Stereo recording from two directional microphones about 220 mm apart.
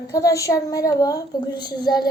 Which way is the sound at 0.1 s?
15° left (ahead or behind).